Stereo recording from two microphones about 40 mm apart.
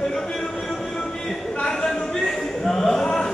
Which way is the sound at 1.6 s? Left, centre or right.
Centre.